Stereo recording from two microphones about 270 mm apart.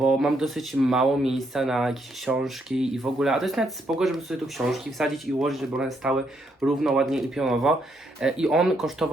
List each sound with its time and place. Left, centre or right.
0.0 s speech: centre